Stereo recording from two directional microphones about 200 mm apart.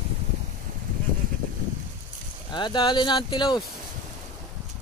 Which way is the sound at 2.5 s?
20° left (ahead or behind).